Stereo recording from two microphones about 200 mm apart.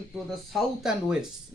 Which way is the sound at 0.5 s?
Centre (ahead or behind).